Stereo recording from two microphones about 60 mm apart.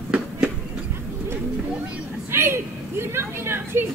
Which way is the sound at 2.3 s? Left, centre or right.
Right.